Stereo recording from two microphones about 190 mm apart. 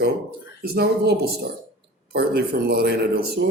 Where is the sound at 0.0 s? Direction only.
55° right (ahead or behind).